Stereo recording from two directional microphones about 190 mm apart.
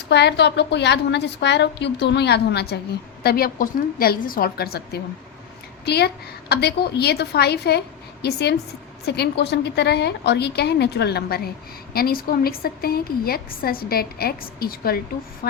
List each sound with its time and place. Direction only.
0.1 s a woman's voice: 60° left (ahead or behind)